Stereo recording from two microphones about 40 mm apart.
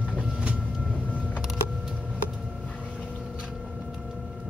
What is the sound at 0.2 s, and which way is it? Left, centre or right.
Train, right.